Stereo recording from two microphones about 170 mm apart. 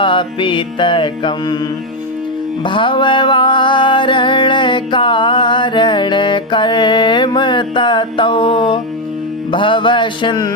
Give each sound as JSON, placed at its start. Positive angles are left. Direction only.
{"t": 0.0, "sound": "music", "side_deg": 30}
{"t": 2.6, "sound": "music", "side_deg": 30}